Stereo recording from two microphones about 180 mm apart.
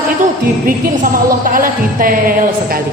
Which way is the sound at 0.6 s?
50° right (ahead or behind).